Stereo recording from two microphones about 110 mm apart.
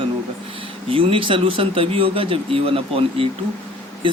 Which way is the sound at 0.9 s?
55° right (ahead or behind).